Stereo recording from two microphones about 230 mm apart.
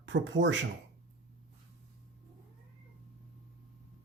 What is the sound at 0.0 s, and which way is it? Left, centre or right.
Speech, right.